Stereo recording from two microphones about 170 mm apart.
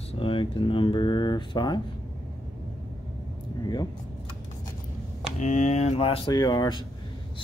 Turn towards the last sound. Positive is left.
turn(degrees=25)  # may be behind; listen again after turning